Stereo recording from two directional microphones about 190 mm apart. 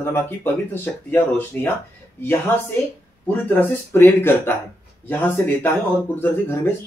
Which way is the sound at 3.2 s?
10° left (ahead or behind).